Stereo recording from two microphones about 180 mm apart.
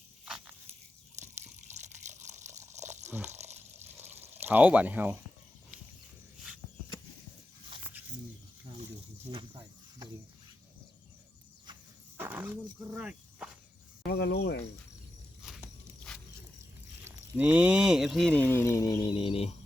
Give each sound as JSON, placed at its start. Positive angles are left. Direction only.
{"t": 0.3, "sound": "a sound", "side_deg": 0}
{"t": 1.7, "sound": "water", "side_deg": -40}
{"t": 3.8, "sound": "water", "side_deg": -10}
{"t": 4.4, "sound": "speech", "side_deg": -10}
{"t": 12.1, "sound": "a sound", "side_deg": -10}
{"t": 14.1, "sound": "cricket", "side_deg": 65}
{"t": 15.4, "sound": "walk", "side_deg": 0}
{"t": 17.0, "sound": "speech", "side_deg": -10}
{"t": 19.1, "sound": "a sound", "side_deg": 30}